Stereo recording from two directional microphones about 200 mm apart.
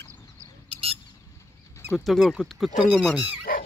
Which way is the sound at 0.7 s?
30° right (ahead or behind).